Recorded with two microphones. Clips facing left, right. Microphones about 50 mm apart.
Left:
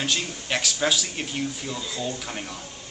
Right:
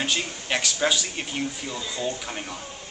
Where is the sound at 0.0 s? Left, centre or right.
Centre.